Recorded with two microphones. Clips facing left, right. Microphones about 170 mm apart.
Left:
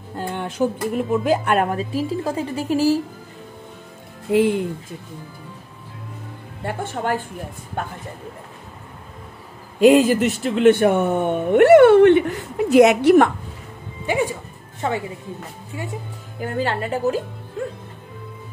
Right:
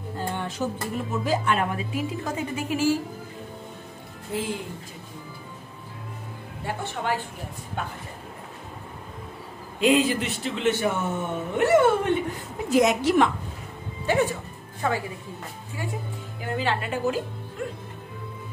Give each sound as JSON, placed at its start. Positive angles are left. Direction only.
{"t": 0.2, "sound": "a sound", "side_deg": 60}
{"t": 1.1, "sound": "speech", "side_deg": 55}
{"t": 1.8, "sound": "a woman's voice", "side_deg": 35}
{"t": 4.3, "sound": "speech", "side_deg": 65}
{"t": 6.6, "sound": "a woman's voice", "side_deg": 50}
{"t": 9.8, "sound": "a woman's voice", "side_deg": 45}
{"t": 10.1, "sound": "speech", "side_deg": 0}
{"t": 10.4, "sound": "speech", "side_deg": 55}
{"t": 14.0, "sound": "speech", "side_deg": 10}
{"t": 14.8, "sound": "speech", "side_deg": 25}
{"t": 16.3, "sound": "a woman's voice", "side_deg": 45}